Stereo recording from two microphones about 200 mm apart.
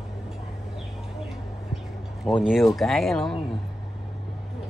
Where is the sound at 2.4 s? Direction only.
5° right (ahead or behind).